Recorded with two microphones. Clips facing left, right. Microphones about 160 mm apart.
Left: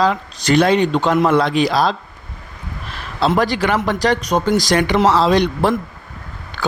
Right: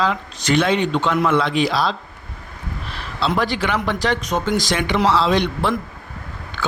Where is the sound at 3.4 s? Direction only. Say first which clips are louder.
Left 4 dB; 40° left (ahead or behind).